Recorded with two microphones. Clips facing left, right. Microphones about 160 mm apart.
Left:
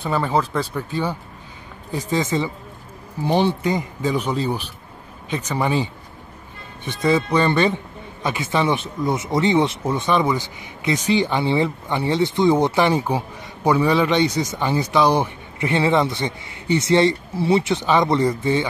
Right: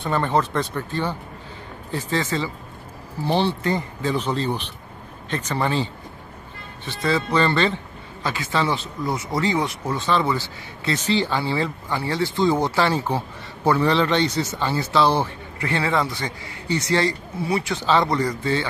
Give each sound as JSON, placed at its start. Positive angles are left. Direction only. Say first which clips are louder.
{"t": 0.0, "sound": "speech", "louder": "left 1 dB", "side_deg": 5}